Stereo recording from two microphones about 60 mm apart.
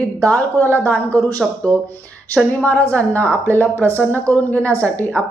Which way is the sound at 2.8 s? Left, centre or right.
Left.